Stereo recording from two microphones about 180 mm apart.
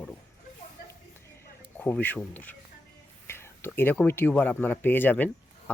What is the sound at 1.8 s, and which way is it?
Speech, 10° left (ahead or behind).